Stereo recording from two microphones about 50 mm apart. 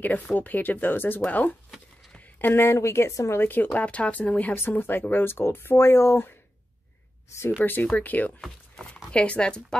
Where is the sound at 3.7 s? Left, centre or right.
Left.